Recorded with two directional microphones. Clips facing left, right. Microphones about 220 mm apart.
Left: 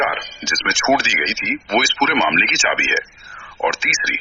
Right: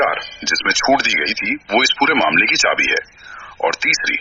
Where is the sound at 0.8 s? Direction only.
40° right (ahead or behind).